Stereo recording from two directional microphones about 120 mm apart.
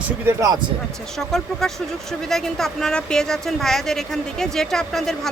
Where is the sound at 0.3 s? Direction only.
25° right (ahead or behind).